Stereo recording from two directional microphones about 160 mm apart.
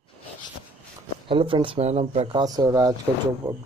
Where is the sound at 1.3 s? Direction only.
30° right (ahead or behind).